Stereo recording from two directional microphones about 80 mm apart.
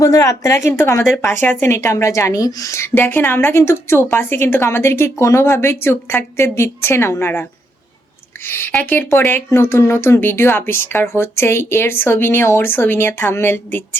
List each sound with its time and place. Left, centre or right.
0.0 s a woman's voice: left
8.4 s a woman's voice: left